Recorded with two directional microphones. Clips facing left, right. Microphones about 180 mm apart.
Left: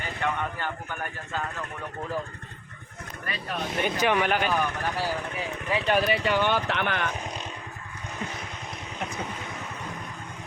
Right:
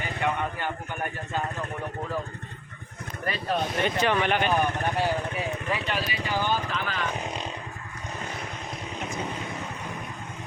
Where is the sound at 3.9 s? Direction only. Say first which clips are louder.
Left 1 dB; 10° left (ahead or behind).